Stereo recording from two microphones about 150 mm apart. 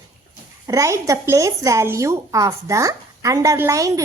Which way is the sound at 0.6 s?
20° right (ahead or behind).